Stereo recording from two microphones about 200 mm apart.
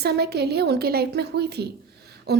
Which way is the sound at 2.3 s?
55° right (ahead or behind).